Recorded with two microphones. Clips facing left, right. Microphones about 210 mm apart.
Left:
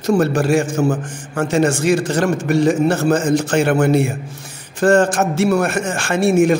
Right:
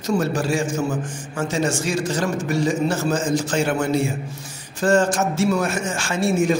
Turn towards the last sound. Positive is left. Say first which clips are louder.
# left 6 dB
turn(degrees=60)  # may be behind; listen again after turning